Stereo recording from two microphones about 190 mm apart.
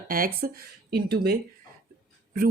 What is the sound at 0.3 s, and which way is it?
A woman's voice, 50° right (ahead or behind).